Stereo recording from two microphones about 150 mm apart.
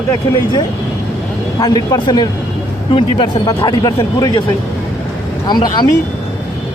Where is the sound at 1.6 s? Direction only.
25° left (ahead or behind).